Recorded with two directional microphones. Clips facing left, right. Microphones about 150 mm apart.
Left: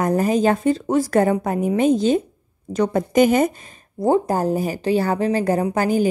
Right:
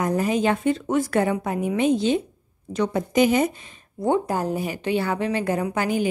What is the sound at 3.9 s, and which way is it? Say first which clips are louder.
A woman's voice: left 4 dB; 35° left (ahead or behind).